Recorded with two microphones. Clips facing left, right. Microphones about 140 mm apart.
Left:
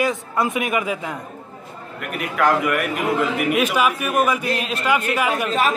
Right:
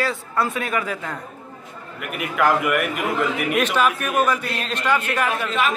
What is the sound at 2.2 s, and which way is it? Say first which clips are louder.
A man's voice: left 1 dB; centre (ahead or behind).